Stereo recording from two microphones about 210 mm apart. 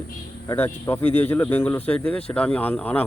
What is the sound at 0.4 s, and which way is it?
Speech, 10° left (ahead or behind).